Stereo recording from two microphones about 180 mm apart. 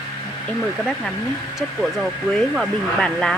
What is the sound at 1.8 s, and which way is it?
Speech, centre (ahead or behind).